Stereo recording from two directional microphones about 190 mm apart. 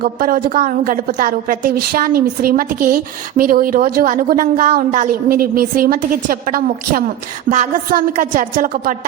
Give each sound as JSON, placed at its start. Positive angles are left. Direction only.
{"t": 0.0, "sound": "a woman's voice", "side_deg": -45}